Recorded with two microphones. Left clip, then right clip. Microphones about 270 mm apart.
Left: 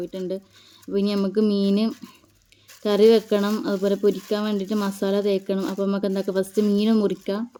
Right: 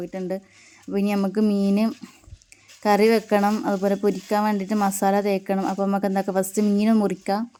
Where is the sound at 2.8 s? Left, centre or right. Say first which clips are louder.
Left 2 dB; centre.